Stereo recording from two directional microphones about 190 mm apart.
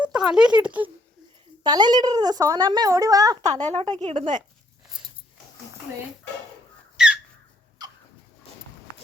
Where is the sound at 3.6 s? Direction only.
35° right (ahead or behind).